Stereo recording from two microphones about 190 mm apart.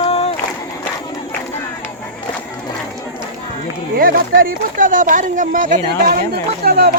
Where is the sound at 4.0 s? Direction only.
50° right (ahead or behind).